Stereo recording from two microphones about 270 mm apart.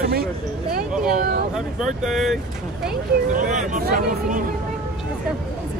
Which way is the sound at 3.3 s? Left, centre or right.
Right.